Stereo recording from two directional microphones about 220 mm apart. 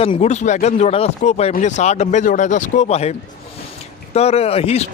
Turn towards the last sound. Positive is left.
turn(degrees=25)  # may be behind; listen again after turning